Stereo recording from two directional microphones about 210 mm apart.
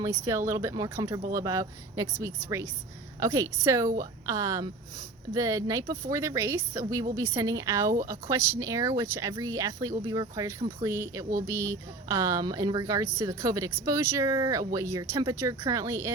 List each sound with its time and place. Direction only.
0.0 s speech: 15° right (ahead or behind)